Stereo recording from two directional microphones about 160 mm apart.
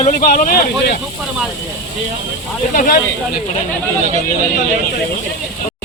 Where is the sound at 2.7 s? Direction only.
60° left (ahead or behind).